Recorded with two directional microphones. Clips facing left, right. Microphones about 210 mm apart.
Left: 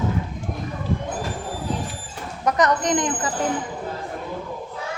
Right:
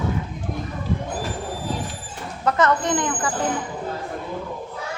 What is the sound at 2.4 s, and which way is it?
Speech, 15° left (ahead or behind).